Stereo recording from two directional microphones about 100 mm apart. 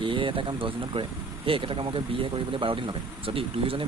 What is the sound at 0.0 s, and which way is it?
Speech, 60° right (ahead or behind).